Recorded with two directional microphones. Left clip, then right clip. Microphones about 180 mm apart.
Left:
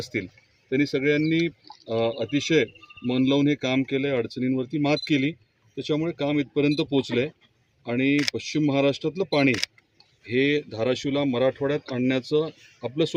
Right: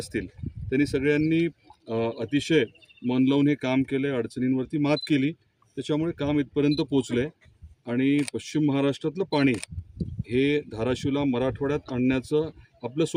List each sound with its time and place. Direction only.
0.0 s speech: 25° right (ahead or behind)
10.2 s speech: 30° right (ahead or behind)